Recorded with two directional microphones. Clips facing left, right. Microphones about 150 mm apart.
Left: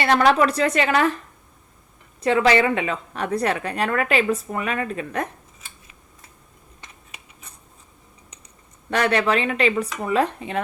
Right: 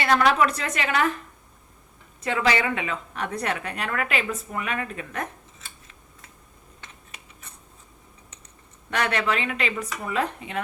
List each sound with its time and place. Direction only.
0.0 s a woman's voice: 35° left (ahead or behind)
2.2 s a woman's voice: 35° left (ahead or behind)
8.9 s a woman's voice: 35° left (ahead or behind)